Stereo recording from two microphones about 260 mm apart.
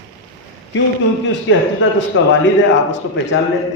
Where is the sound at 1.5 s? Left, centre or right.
Left.